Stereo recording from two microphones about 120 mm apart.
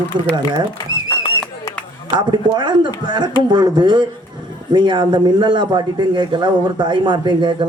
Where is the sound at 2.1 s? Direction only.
40° right (ahead or behind).